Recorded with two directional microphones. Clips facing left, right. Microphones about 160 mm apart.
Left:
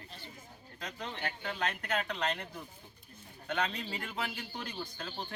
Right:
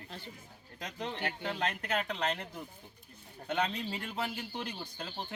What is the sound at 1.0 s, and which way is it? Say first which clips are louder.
Speech: right 4 dB; 35° right (ahead or behind).